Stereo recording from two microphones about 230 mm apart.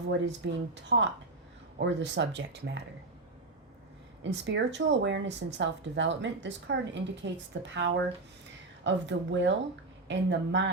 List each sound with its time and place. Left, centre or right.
0.1 s speech: right
4.2 s speech: right